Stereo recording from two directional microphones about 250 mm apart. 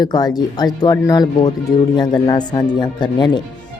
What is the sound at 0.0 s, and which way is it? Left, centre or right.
Speech, centre.